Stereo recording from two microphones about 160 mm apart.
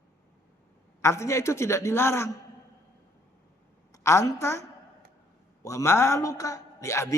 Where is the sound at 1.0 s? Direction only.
20° left (ahead or behind).